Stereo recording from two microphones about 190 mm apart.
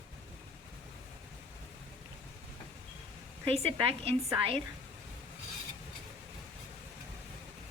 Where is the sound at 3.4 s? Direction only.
30° right (ahead or behind).